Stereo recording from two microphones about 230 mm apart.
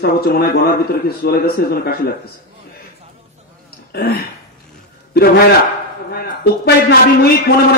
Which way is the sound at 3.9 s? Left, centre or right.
Left.